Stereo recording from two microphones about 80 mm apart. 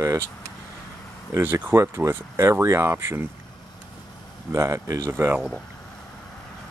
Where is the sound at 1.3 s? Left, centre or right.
Right.